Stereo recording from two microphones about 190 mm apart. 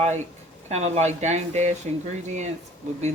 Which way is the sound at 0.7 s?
35° right (ahead or behind).